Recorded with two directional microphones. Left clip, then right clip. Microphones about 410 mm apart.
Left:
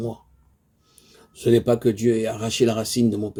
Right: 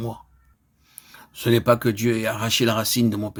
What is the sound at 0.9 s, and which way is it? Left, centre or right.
Speech, centre.